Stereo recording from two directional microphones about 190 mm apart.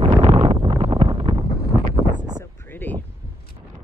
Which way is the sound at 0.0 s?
30° right (ahead or behind).